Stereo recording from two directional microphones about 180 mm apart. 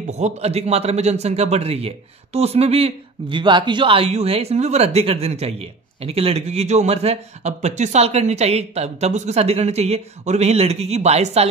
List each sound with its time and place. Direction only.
0.1 s a man's voice: 35° right (ahead or behind)